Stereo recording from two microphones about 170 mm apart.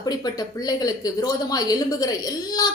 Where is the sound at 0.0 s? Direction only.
25° left (ahead or behind).